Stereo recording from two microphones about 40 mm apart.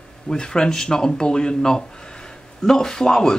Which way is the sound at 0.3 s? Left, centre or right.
Centre.